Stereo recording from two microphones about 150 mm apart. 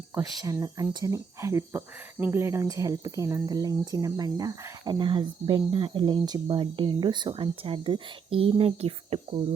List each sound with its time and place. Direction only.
0.1 s speech: 15° right (ahead or behind); by 9.5 s 40° right (ahead or behind)